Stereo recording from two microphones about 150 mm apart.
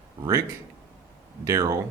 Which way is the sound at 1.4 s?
20° right (ahead or behind).